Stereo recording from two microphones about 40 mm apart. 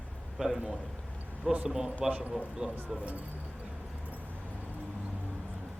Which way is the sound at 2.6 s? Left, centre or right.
Right.